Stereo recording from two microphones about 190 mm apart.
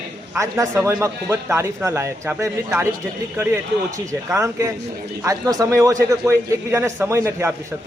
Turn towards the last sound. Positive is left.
turn(degrees=-15)  # may be behind; listen again after turning